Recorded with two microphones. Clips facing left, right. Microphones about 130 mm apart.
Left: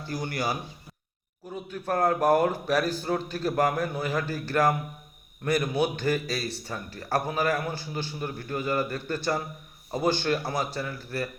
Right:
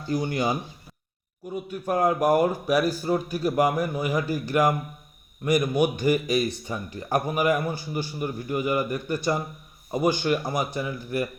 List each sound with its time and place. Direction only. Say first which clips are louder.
0.1 s a man's voice: right 5 dB; 20° right (ahead or behind)
1.5 s a man's voice: right 2 dB; 10° right (ahead or behind)